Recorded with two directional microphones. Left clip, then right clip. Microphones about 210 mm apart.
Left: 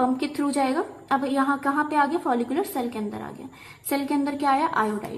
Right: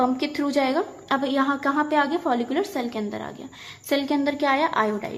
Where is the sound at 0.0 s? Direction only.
15° right (ahead or behind).